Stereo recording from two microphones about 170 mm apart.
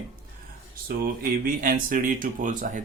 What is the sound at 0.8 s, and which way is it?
Speech, 55° right (ahead or behind).